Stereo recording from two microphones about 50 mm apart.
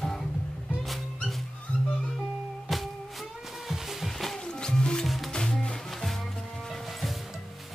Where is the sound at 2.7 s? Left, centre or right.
Centre.